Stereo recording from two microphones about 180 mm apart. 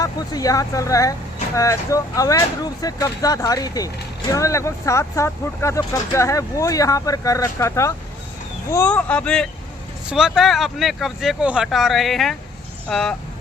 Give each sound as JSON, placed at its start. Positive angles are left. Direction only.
{"t": 0.0, "sound": "speech", "side_deg": 20}